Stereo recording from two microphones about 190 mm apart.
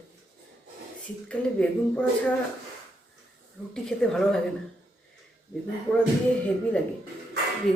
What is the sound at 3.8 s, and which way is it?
Speech, 5° left (ahead or behind).